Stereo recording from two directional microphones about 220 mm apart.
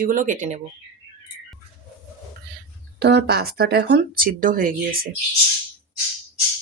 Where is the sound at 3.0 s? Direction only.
50° right (ahead or behind).